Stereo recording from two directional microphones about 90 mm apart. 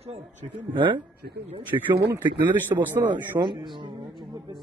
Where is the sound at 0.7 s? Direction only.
65° right (ahead or behind).